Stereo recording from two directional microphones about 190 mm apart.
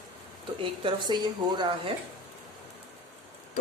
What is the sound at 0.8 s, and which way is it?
A woman's voice, 25° right (ahead or behind).